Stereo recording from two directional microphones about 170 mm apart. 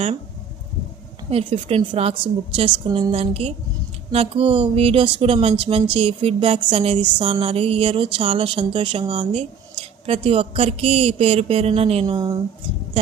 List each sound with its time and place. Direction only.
1.3 s speech: 35° right (ahead or behind)
12.1 s speech: 20° right (ahead or behind)